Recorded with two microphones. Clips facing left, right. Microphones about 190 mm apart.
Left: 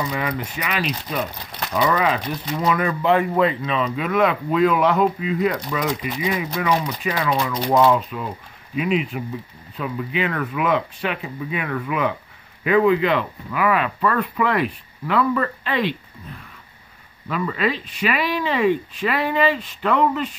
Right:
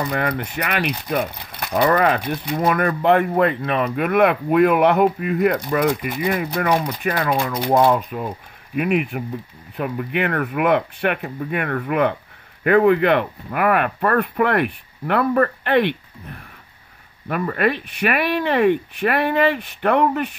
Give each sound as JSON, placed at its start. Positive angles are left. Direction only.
{"t": 0.0, "sound": "speech", "side_deg": -55}
{"t": 8.7, "sound": "speech", "side_deg": -60}